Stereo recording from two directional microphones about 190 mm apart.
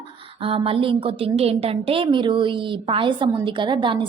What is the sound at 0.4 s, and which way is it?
A woman's voice, 30° right (ahead or behind).